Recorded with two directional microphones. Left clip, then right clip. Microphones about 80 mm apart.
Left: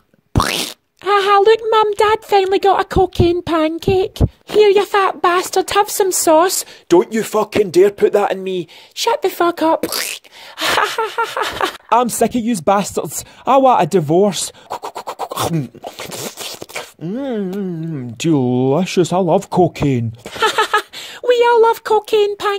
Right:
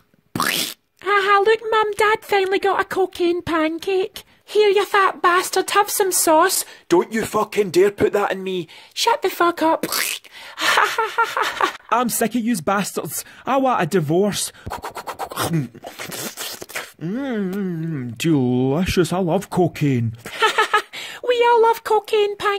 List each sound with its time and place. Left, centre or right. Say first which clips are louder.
0.3 s speech: left 3 dB; left; by 7.4 s centre
7.6 s speech: left 5 dB; centre
10.6 s gasp: left 1 dB; centre
12.1 s speech: left 5 dB; left
15.8 s a sound: left 4 dB; left
17.0 s speech: left 4 dB; centre
18.2 s speech: left 4 dB; left